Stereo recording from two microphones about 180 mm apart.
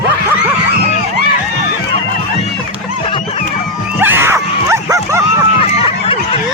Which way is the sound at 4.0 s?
10° right (ahead or behind).